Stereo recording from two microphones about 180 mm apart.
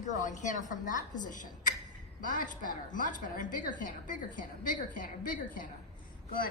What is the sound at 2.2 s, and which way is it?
A woman's voice, 45° left (ahead or behind).